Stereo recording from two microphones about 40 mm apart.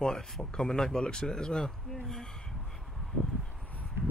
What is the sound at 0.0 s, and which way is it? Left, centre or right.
Speech, centre.